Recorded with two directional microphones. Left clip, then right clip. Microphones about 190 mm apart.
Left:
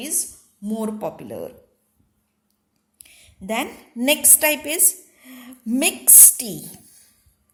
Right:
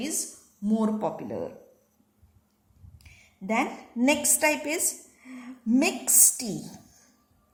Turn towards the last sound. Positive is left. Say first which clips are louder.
# left 2 dB
turn(degrees=50)  # may be behind; listen again after turning